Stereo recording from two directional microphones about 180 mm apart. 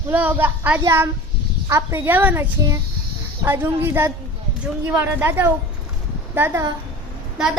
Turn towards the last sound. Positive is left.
turn(degrees=-5)  # may be behind; listen again after turning